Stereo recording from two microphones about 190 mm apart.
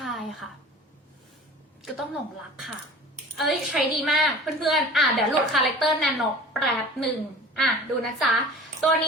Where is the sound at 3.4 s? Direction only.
Centre (ahead or behind).